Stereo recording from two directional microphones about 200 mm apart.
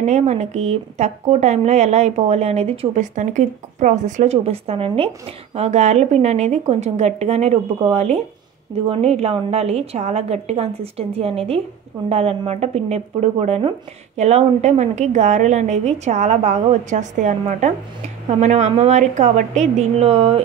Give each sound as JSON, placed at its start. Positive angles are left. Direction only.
{"t": 0.0, "sound": "speech", "side_deg": -35}